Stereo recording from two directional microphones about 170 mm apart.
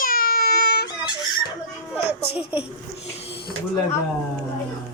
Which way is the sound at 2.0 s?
70° left (ahead or behind).